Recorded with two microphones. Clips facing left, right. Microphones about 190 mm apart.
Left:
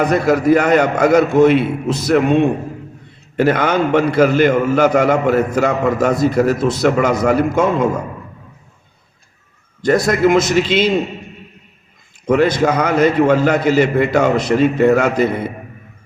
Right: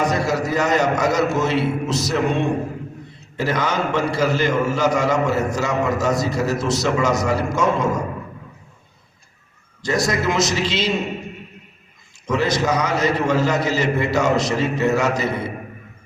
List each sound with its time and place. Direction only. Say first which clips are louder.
0.0 s a man's voice: left 6 dB; 55° left (ahead or behind)
9.8 s a man's voice: left 7 dB; 55° left (ahead or behind)
12.2 s a man's voice: left 7 dB; 55° left (ahead or behind)